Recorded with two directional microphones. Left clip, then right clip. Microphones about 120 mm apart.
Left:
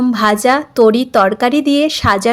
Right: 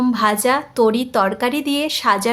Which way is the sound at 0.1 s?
40° left (ahead or behind).